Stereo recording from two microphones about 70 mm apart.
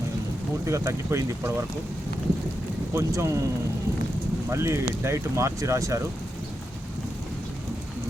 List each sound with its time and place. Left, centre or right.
0.6 s speech: right
2.9 s speech: right
4.4 s speech: right